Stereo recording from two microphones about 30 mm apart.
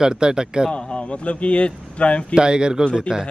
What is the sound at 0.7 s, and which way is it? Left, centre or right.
Speech, left.